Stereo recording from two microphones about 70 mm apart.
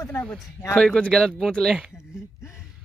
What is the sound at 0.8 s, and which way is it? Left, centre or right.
Speech, centre.